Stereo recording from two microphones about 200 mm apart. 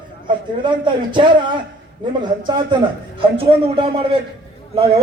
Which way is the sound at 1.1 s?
25° right (ahead or behind).